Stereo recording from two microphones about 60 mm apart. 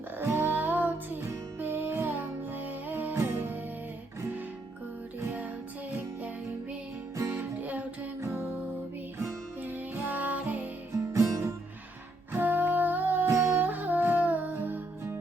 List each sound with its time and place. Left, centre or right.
0.2 s music: right
5.9 s music: right
9.6 s music: right
10.9 s music: right
12.3 s music: right
13.2 s music: right
13.6 s music: right